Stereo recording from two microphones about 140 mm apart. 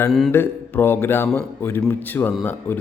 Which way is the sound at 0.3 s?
15° left (ahead or behind).